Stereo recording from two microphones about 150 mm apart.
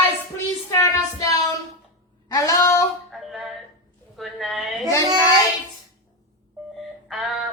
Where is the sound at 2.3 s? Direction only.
20° left (ahead or behind).